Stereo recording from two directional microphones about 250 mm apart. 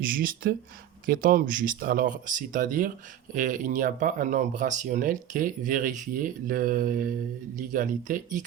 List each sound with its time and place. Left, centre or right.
0.0 s speech: right